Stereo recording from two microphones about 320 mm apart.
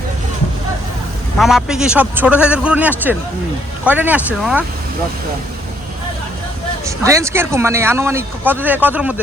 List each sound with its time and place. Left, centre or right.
1.4 s a man's voice: centre
6.8 s speech: centre